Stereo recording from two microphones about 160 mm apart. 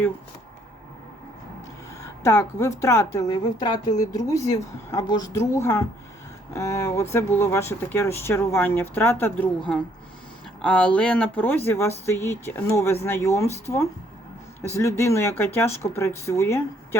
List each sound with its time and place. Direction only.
2.2 s a woman's voice: 20° left (ahead or behind)